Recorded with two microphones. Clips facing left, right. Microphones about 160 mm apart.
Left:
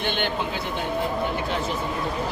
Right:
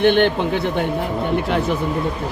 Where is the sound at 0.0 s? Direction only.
60° right (ahead or behind).